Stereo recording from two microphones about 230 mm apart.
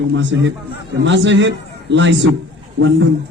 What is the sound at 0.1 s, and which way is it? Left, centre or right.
A man's voice, right.